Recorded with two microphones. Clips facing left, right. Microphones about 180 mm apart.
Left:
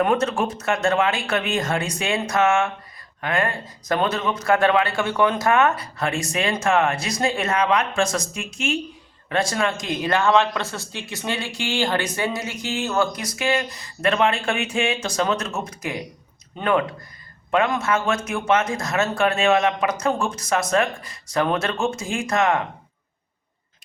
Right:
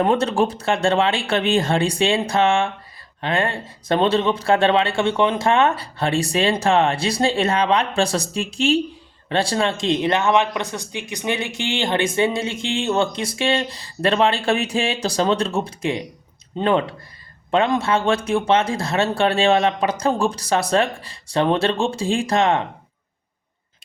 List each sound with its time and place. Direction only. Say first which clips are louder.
0.0 s a man's voice: right 2 dB; 30° right (ahead or behind)